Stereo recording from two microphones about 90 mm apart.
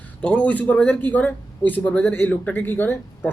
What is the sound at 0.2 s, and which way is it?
A man's voice, 15° left (ahead or behind).